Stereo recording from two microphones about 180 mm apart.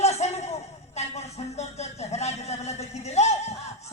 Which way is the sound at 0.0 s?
35° left (ahead or behind).